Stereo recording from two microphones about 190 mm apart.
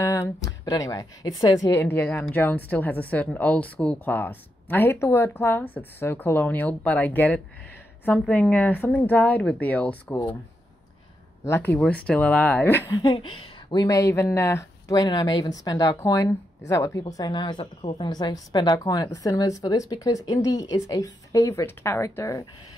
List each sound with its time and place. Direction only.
0.0 s speech: 15° left (ahead or behind)
11.4 s speech: 10° left (ahead or behind)
13.0 s speech: 30° left (ahead or behind)